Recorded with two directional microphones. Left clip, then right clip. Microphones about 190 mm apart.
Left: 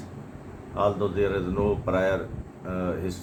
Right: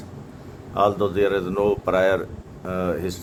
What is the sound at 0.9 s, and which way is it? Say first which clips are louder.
A man's voice: right 3 dB; 60° right (ahead or behind).